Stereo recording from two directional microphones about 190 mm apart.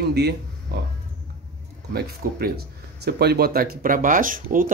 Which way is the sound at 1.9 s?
55° right (ahead or behind).